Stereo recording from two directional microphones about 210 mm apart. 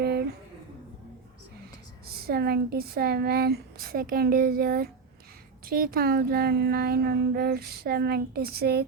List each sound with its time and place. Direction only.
2.0 s speech: 45° right (ahead or behind)